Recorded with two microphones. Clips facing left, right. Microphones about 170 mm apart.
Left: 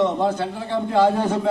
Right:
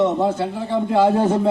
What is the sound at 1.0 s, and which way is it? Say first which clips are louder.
Speech: right 3 dB; 25° right (ahead or behind).